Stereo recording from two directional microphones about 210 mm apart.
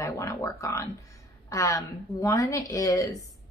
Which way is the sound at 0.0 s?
15° left (ahead or behind).